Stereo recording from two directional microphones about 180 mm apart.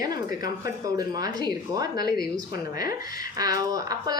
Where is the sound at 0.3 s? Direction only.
55° left (ahead or behind).